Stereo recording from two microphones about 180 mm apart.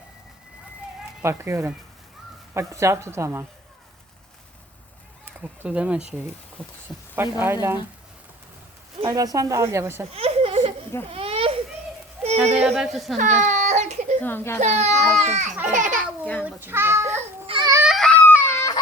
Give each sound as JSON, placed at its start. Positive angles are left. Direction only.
{"t": 1.2, "sound": "a woman's voice", "side_deg": -15}
{"t": 5.2, "sound": "speech", "side_deg": -5}
{"t": 7.2, "sound": "a woman's voice", "side_deg": -15}
{"t": 9.0, "sound": "a woman's voice", "side_deg": -20}
{"t": 10.1, "sound": "a sound", "side_deg": -35}
{"t": 12.2, "sound": "yodeling", "side_deg": 0}
{"t": 12.5, "sound": "speech", "side_deg": 0}
{"t": 13.1, "sound": "baby cry", "side_deg": -40}
{"t": 14.2, "sound": "a child's voice", "side_deg": 10}
{"t": 14.6, "sound": "a child's voice", "side_deg": -40}
{"t": 16.4, "sound": "a woman's voice", "side_deg": -10}
{"t": 17.1, "sound": "baby cry", "side_deg": -35}
{"t": 17.8, "sound": "baby cry", "side_deg": 0}